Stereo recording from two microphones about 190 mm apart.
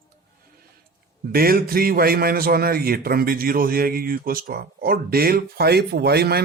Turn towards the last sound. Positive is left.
turn(degrees=-55)  # may be behind; listen again after turning